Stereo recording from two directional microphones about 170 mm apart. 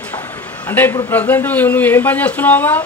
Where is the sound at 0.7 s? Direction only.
15° left (ahead or behind).